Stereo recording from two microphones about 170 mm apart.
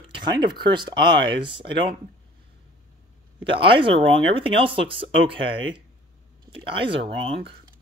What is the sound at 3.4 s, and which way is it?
Speech, 30° right (ahead or behind).